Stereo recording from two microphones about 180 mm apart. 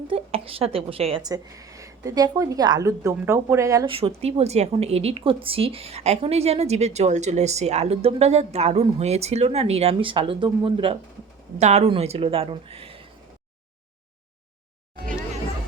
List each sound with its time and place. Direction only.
0.1 s a woman's voice: 30° right (ahead or behind)
3.9 s a woman's voice: 35° right (ahead or behind)